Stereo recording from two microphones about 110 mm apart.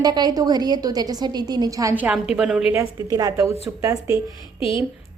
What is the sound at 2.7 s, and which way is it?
A woman's voice, 30° right (ahead or behind).